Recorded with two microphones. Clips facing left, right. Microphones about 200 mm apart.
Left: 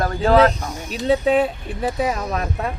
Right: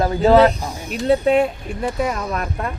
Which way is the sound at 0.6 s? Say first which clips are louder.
Right 1 dB; 30° right (ahead or behind).